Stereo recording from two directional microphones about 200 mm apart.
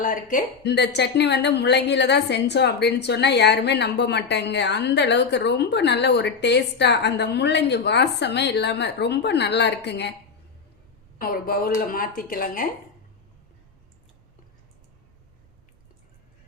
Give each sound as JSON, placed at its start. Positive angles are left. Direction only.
{"t": 0.0, "sound": "speech", "side_deg": 40}
{"t": 0.6, "sound": "a woman's voice", "side_deg": 60}
{"t": 11.2, "sound": "speech", "side_deg": 45}